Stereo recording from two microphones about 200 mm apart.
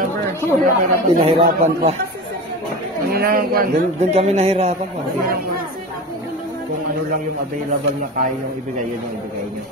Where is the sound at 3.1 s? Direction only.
50° right (ahead or behind).